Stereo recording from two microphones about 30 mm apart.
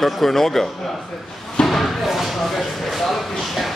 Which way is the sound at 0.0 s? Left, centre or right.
Centre.